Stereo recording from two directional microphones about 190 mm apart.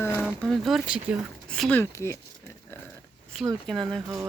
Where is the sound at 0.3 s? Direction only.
Centre (ahead or behind).